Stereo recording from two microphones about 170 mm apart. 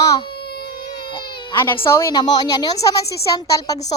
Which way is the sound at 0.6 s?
25° left (ahead or behind).